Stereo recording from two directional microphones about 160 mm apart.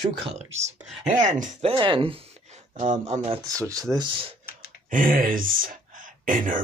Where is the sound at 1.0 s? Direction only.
50° right (ahead or behind).